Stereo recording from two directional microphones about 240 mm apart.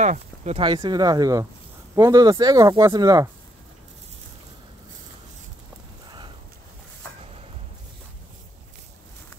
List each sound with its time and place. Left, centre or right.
0.0 s speech: right
6.0 s horse: centre